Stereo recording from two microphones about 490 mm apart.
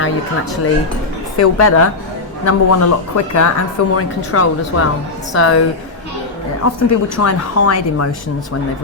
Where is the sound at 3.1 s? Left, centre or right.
Left.